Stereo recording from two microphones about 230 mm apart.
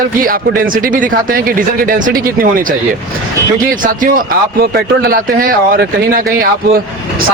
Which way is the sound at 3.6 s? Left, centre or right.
Right.